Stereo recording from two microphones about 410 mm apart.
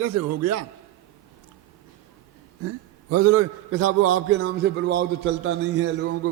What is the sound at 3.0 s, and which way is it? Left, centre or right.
A man's voice, right.